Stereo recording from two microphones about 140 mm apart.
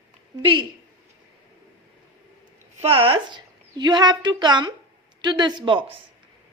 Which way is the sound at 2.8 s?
40° right (ahead or behind).